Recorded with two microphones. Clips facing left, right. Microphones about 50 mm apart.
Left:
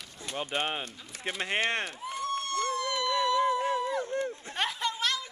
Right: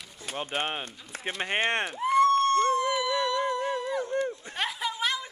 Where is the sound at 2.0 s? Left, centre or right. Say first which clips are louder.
Right 12 dB; right.